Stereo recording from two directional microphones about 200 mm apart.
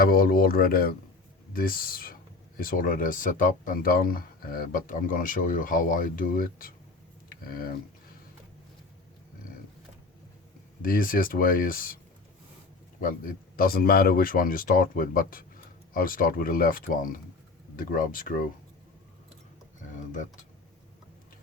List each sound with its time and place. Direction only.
0.0 s speech: 45° left (ahead or behind)
7.3 s a sound: 50° left (ahead or behind)
10.8 s speech: 45° left (ahead or behind)
13.0 s speech: 45° left (ahead or behind)